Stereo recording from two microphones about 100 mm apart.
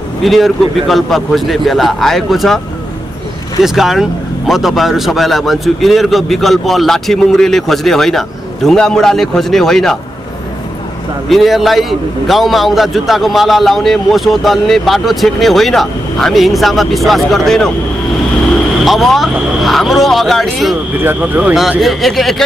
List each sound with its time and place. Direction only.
0.2 s a man's voice: centre (ahead or behind)
3.6 s a man's voice: centre (ahead or behind)
11.2 s a man's voice: centre (ahead or behind)
18.9 s a man's voice: centre (ahead or behind)
21.0 s speech: 20° right (ahead or behind)
21.5 s a man's voice: centre (ahead or behind)